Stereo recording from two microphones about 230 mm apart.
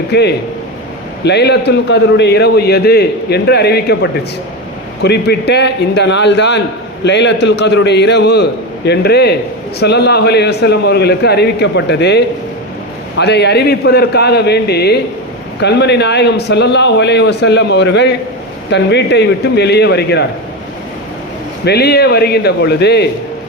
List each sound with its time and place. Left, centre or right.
0.1 s a man's voice: left
21.6 s a man's voice: left